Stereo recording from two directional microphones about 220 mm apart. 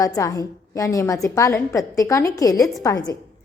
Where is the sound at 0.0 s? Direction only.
15° left (ahead or behind).